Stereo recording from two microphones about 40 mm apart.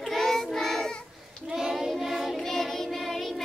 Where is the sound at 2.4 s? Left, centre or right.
Centre.